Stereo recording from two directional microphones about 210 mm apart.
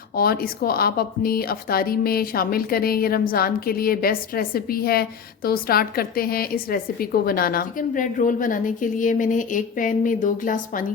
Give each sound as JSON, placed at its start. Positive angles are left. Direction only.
{"t": 0.2, "sound": "a woman's voice", "side_deg": 45}